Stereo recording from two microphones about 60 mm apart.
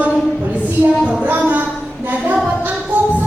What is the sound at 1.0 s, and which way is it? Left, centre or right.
Music, centre.